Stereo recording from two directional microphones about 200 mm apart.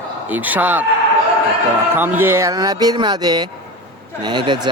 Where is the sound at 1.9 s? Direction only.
10° right (ahead or behind).